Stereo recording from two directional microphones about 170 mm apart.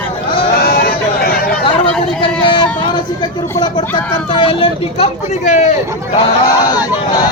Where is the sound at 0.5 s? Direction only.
70° left (ahead or behind).